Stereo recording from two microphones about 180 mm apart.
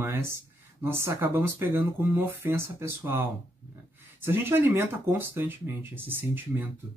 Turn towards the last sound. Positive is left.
turn(degrees=-10)  # may be behind; listen again after turning